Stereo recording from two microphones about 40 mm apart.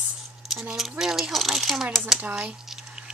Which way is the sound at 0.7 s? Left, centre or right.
Centre.